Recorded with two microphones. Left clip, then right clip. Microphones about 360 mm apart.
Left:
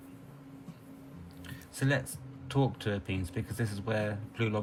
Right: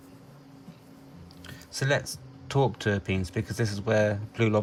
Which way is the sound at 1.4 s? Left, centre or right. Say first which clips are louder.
Right 5 dB; centre.